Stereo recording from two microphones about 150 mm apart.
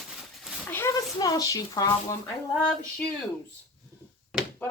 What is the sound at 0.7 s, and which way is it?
Speech, 15° left (ahead or behind).